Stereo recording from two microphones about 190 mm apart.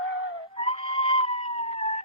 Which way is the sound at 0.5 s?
30° left (ahead or behind).